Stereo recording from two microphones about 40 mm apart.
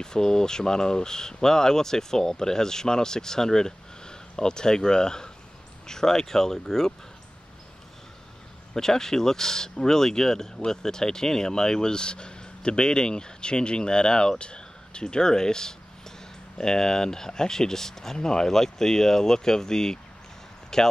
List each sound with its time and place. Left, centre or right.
0.0 s speech: centre
8.7 s speech: centre